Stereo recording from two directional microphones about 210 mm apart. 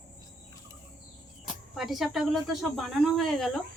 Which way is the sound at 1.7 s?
Centre (ahead or behind).